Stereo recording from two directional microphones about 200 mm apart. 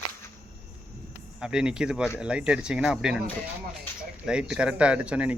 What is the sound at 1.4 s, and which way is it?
Speech, 5° right (ahead or behind).